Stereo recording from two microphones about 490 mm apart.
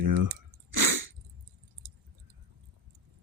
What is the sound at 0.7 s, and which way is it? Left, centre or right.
Sneeze, right.